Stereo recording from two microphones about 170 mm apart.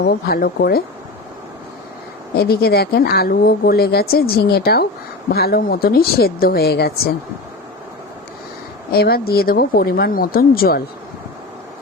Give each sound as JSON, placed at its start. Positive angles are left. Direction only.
{"t": 0.0, "sound": "speech", "side_deg": 70}
{"t": 2.3, "sound": "speech", "side_deg": 65}
{"t": 8.9, "sound": "speech", "side_deg": 65}